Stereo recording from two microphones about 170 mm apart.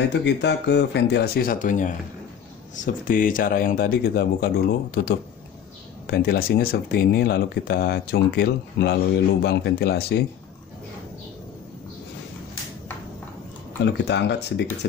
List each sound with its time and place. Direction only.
0.1 s speech: 90° left; by 10.2 s 70° left (ahead or behind)
13.8 s speech: 90° left